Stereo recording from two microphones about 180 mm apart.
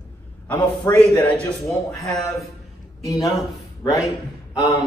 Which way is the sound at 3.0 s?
20° left (ahead or behind).